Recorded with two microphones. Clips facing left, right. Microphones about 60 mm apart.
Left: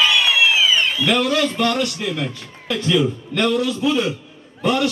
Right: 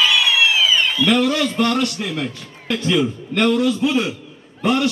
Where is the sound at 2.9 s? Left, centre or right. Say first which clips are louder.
Left 1 dB; right.